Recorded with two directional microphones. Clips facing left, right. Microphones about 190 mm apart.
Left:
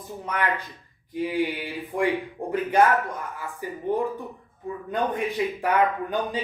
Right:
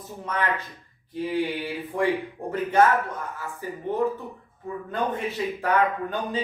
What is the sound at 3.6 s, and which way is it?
Speech, 15° left (ahead or behind).